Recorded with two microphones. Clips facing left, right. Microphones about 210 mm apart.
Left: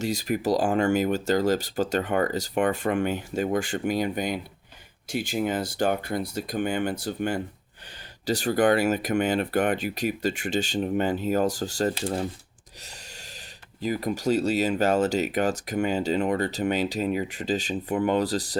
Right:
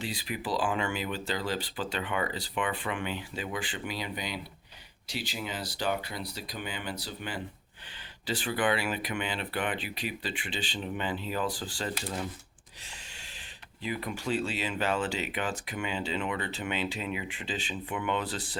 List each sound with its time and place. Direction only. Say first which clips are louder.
0.0 s speech: left 10 dB; 45° left (ahead or behind)
12.8 s a sound: left 4 dB; 40° left (ahead or behind)
13.8 s speech: left 8 dB; 40° left (ahead or behind)